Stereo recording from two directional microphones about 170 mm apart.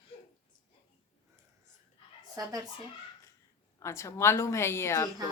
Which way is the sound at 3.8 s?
15° left (ahead or behind).